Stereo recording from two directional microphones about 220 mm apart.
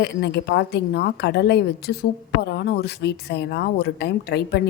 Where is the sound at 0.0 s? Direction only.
50° left (ahead or behind).